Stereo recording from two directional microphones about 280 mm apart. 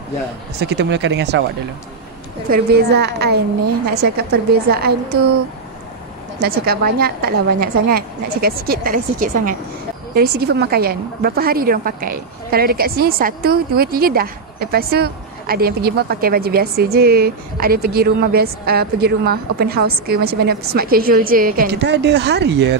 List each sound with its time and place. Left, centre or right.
0.7 s a woman's voice: right
2.5 s a woman's voice: right
6.4 s a woman's voice: right